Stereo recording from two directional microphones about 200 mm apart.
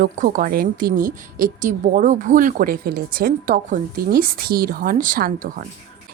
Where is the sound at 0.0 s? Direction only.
45° right (ahead or behind).